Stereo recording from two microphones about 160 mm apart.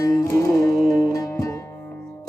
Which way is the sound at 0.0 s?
20° left (ahead or behind).